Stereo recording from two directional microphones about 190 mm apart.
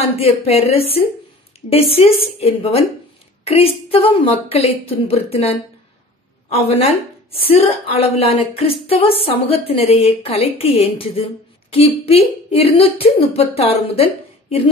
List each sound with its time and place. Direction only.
0.1 s a woman's voice: 30° left (ahead or behind)